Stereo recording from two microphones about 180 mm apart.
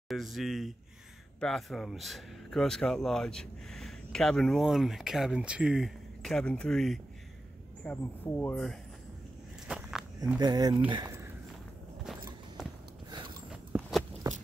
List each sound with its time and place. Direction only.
0.1 s speech: centre (ahead or behind)
9.7 s walk: 5° right (ahead or behind)
10.4 s speech: 20° right (ahead or behind)
11.1 s walk: 15° right (ahead or behind)
12.0 s walk: 5° right (ahead or behind)
13.5 s a sound: 5° right (ahead or behind)